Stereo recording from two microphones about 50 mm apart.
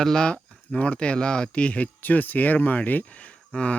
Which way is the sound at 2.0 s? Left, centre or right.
Left.